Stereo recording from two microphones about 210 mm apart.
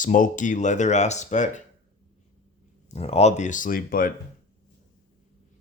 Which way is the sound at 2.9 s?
30° left (ahead or behind).